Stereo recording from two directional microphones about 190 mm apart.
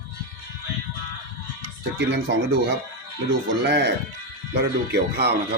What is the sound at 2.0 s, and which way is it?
Speech, 65° right (ahead or behind).